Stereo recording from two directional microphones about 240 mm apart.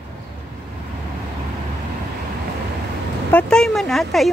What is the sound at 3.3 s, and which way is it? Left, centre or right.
Speech, centre.